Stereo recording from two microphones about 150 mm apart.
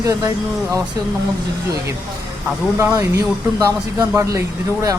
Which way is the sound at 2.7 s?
20° right (ahead or behind).